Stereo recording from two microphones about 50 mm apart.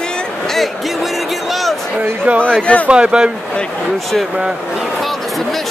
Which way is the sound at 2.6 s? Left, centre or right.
Left.